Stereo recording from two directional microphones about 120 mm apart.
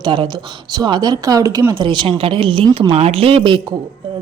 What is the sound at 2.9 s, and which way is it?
Speech, 55° right (ahead or behind).